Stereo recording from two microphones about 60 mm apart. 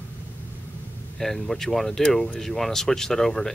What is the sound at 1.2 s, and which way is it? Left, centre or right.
Speech, centre.